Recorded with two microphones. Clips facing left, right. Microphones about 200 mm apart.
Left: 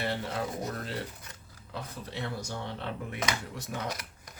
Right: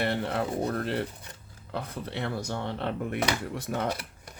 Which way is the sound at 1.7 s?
60° right (ahead or behind).